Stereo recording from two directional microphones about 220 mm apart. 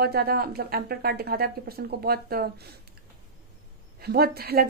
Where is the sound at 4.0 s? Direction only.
45° right (ahead or behind).